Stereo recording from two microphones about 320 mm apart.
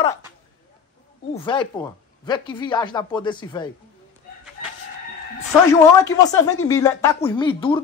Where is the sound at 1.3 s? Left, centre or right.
Centre.